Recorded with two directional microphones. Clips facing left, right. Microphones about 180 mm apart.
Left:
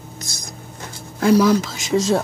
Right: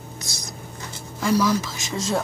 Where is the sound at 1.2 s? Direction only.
65° left (ahead or behind).